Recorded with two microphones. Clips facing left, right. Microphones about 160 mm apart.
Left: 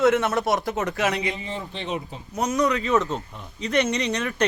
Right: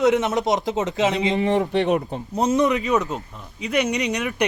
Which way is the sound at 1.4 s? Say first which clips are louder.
Right 13 dB; 70° right (ahead or behind).